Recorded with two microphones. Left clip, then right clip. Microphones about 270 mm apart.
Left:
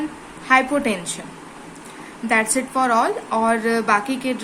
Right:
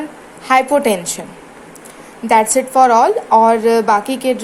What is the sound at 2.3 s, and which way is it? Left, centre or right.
A woman's voice, centre.